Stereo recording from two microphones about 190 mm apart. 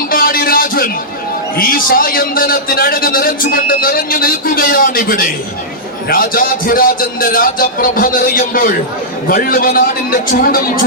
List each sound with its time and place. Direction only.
0.1 s music: 50° left (ahead or behind)
1.5 s a man's voice: 50° left (ahead or behind)